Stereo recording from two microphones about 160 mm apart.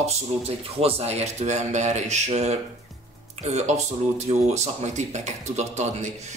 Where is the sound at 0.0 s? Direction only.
40° right (ahead or behind).